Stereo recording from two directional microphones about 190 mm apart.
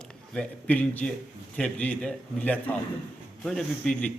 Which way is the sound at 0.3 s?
10° left (ahead or behind).